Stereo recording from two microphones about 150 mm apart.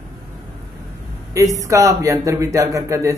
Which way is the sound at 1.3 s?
20° right (ahead or behind).